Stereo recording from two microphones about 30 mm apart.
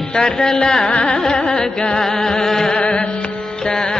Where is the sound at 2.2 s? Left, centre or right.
Left.